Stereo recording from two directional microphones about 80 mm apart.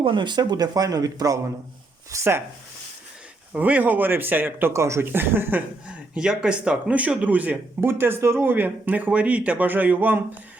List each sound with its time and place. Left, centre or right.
0.0 s speech: right
2.0 s speech: right
3.5 s speech: right
5.9 s speech: centre